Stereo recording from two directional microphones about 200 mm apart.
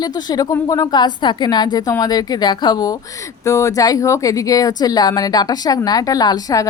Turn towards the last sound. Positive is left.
turn(degrees=20)  # may be behind; listen again after turning